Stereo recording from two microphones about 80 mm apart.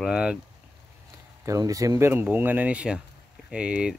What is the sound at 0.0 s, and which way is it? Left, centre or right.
Speech, centre.